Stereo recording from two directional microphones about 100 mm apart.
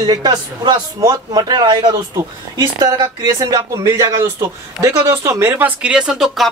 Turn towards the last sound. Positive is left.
turn(degrees=0)  # may be behind; listen again after turning